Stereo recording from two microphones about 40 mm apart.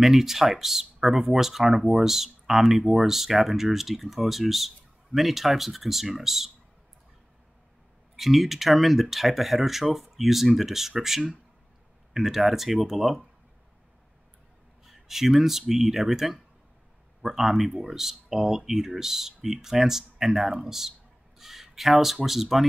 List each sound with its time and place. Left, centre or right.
0.0 s speech: centre
8.2 s speech: centre
14.9 s speech: centre